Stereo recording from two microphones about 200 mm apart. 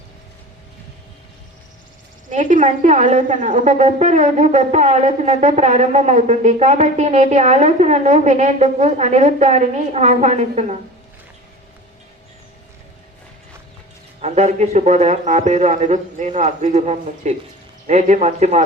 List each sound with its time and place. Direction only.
2.3 s a woman's voice: 40° right (ahead or behind)
14.2 s a woman's voice: 35° right (ahead or behind)